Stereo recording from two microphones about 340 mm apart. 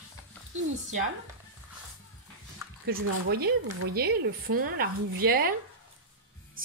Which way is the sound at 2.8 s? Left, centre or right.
Right.